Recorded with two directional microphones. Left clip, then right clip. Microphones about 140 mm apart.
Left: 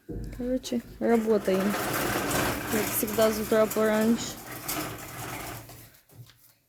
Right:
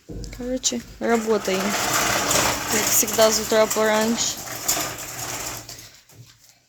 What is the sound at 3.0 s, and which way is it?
Speech, 5° left (ahead or behind).